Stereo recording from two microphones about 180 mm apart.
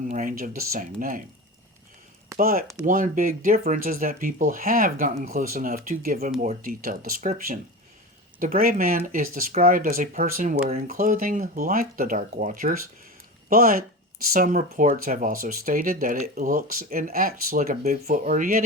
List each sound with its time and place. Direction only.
0.1 s speech: 45° right (ahead or behind)
2.4 s speech: 55° right (ahead or behind)